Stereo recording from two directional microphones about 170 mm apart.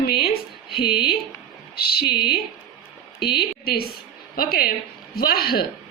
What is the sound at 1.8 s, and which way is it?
A woman's voice, 65° left (ahead or behind).